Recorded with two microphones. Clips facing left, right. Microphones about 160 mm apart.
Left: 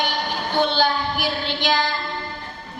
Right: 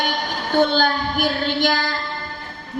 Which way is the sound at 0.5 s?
45° right (ahead or behind).